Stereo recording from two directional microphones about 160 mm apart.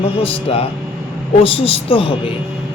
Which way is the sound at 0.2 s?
35° left (ahead or behind).